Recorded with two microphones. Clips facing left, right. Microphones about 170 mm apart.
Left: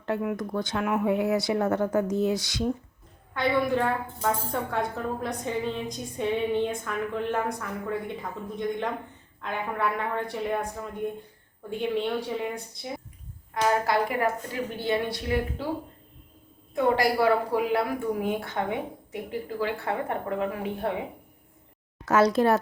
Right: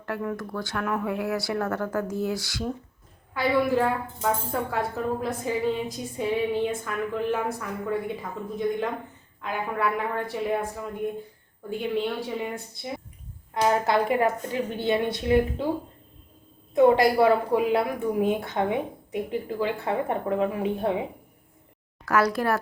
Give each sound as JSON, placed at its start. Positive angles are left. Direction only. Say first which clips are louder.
{"t": 0.0, "sound": "speech", "louder": "left 2 dB", "side_deg": 20}
{"t": 3.3, "sound": "a woman's voice", "louder": "right 2 dB", "side_deg": -5}
{"t": 9.4, "sound": "a woman's voice", "louder": "right 2 dB", "side_deg": 0}
{"t": 11.7, "sound": "a woman's voice", "louder": "even", "side_deg": 0}
{"t": 13.6, "sound": "a woman's voice", "louder": "right 2 dB", "side_deg": -20}
{"t": 16.7, "sound": "a woman's voice", "louder": "right 5 dB", "side_deg": -20}
{"t": 22.0, "sound": "speech", "louder": "left 3 dB", "side_deg": 25}